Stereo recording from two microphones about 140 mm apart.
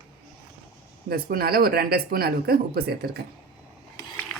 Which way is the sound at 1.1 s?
90° right.